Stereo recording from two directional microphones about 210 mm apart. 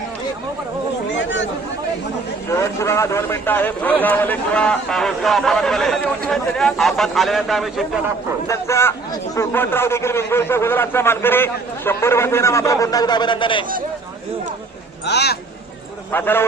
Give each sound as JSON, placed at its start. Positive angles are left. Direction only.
{"t": 1.1, "sound": "chatter", "side_deg": 60}
{"t": 2.5, "sound": "a man's voice", "side_deg": 15}
{"t": 8.4, "sound": "a man's voice", "side_deg": 15}
{"t": 15.0, "sound": "speech", "side_deg": 50}
{"t": 16.1, "sound": "a man's voice", "side_deg": 10}